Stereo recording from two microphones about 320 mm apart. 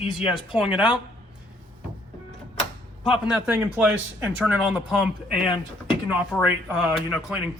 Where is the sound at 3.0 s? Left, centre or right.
Centre.